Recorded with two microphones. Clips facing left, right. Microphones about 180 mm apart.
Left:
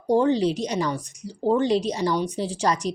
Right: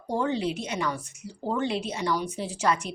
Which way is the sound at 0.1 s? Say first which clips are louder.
Left 7 dB; 35° left (ahead or behind).